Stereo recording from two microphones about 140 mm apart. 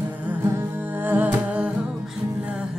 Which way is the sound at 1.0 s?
15° right (ahead or behind).